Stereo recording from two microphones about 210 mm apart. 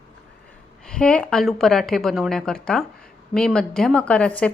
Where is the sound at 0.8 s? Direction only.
5° left (ahead or behind).